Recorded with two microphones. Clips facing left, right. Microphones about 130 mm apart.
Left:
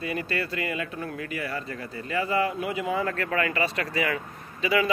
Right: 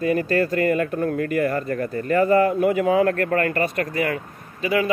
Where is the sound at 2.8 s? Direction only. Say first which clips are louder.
Right 9 dB; 65° right (ahead or behind).